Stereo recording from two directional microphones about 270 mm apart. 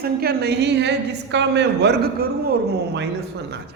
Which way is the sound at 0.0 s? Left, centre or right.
Right.